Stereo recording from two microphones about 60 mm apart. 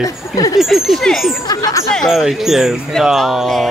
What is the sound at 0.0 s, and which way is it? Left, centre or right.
Speech, left.